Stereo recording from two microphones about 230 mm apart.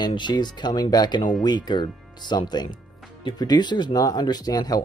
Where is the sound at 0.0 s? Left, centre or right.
Centre.